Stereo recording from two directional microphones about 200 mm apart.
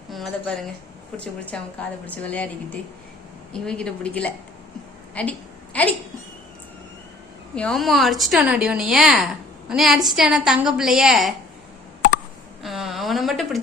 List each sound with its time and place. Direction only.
0.1 s a woman's voice: centre (ahead or behind)
3.5 s a woman's voice: 5° left (ahead or behind)
7.5 s speech: 5° left (ahead or behind)
12.6 s a sound: centre (ahead or behind)